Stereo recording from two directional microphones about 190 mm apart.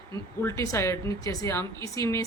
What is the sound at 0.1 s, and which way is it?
A woman's voice, 15° left (ahead or behind).